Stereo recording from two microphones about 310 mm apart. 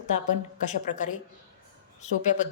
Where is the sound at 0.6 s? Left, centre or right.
Left.